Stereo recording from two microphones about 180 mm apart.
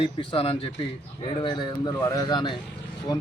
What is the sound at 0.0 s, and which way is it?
A man's voice, 30° left (ahead or behind).